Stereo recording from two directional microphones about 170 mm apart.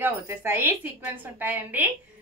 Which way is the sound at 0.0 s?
10° right (ahead or behind).